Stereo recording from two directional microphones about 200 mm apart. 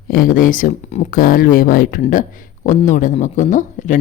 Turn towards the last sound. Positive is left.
turn(degrees=40)  # may be behind; listen again after turning